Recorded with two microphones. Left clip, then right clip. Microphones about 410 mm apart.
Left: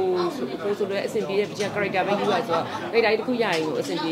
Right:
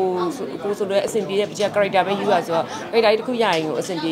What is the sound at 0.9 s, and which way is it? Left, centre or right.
Speech, centre.